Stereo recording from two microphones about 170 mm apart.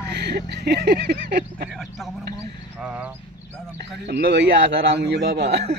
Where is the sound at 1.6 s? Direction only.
Centre (ahead or behind).